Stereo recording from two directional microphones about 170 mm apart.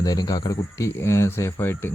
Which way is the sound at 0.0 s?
20° left (ahead or behind).